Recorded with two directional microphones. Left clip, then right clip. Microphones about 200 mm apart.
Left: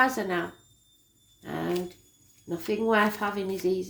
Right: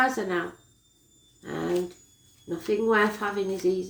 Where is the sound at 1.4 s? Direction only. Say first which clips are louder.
Right 1 dB; 40° left (ahead or behind).